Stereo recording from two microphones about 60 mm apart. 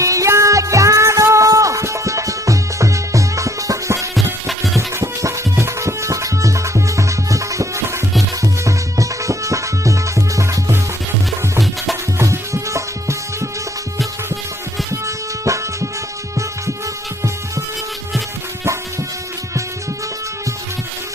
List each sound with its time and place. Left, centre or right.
0.0 s music: right
3.9 s music: centre
4.9 s music: right
12.2 s music: right
15.0 s music: right